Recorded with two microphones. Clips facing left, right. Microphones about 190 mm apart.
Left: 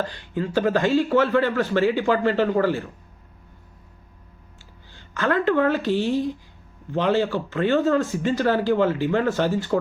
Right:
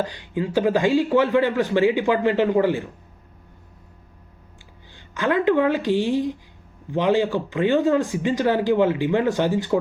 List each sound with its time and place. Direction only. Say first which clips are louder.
0.0 s speech: right 1 dB; 15° right (ahead or behind)
4.9 s speech: right 1 dB; 15° right (ahead or behind)